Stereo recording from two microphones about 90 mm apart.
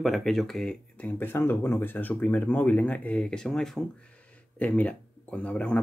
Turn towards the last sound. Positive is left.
turn(degrees=10)  # may be behind; listen again after turning